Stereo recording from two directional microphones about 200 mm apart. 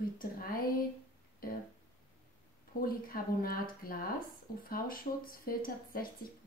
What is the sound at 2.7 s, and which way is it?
Speech, 45° left (ahead or behind).